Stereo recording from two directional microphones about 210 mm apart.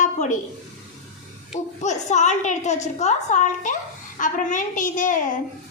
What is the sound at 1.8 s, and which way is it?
Speech, 35° left (ahead or behind).